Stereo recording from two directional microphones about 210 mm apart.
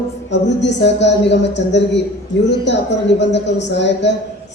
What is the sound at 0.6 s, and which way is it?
A man's voice, 55° left (ahead or behind).